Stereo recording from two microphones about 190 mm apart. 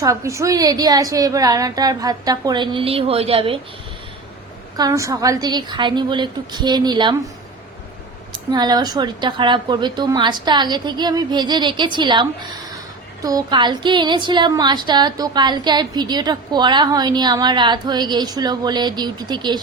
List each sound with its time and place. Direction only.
0.0 s a woman's voice: 15° right (ahead or behind)
4.8 s a woman's voice: 15° right (ahead or behind)
8.3 s a woman's voice: 20° right (ahead or behind)